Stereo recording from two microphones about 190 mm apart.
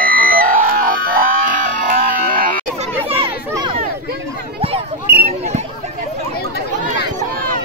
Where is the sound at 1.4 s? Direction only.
45° right (ahead or behind).